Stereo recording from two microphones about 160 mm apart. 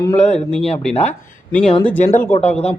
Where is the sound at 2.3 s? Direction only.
40° left (ahead or behind).